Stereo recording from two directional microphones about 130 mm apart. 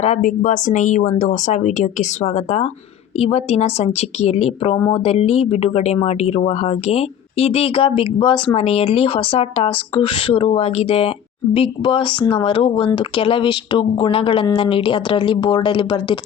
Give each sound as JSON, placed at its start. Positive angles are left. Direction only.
{"t": 0.0, "sound": "a woman's voice", "side_deg": 80}